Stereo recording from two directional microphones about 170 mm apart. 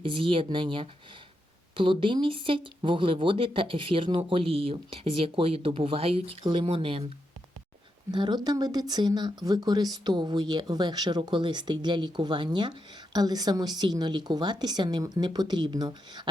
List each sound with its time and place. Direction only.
0.0 s speech: 30° right (ahead or behind)
8.1 s speech: 25° right (ahead or behind)